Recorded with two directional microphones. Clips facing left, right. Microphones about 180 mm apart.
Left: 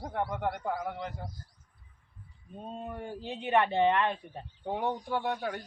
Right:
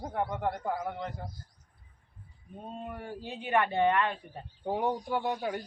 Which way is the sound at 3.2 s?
25° left (ahead or behind).